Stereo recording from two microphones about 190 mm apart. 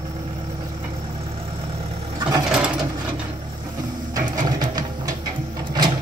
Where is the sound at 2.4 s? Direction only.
5° right (ahead or behind).